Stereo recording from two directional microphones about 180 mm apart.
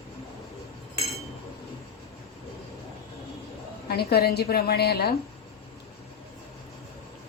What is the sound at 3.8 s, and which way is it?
A woman's voice, 60° left (ahead or behind).